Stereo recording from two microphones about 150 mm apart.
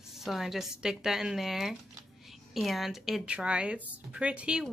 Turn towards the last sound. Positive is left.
turn(degrees=-5)  # may be behind; listen again after turning